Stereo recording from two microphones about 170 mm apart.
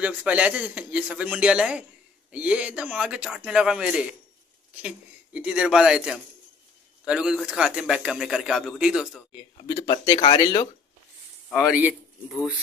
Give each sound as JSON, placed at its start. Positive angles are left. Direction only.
{"t": 0.0, "sound": "a man's voice", "side_deg": -10}
{"t": 9.6, "sound": "speech", "side_deg": 25}
{"t": 11.5, "sound": "a man's voice", "side_deg": -5}